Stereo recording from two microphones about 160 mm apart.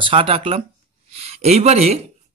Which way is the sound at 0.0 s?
35° right (ahead or behind).